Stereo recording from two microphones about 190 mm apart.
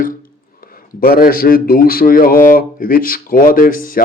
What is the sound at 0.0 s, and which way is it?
Speech, 45° left (ahead or behind).